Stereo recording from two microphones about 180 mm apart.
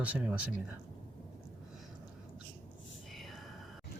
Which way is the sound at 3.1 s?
Centre (ahead or behind).